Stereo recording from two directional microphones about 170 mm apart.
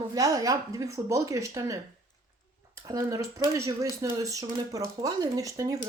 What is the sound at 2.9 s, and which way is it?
Speech, 20° right (ahead or behind).